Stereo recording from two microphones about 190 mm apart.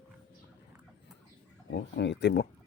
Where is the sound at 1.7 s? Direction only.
65° left (ahead or behind).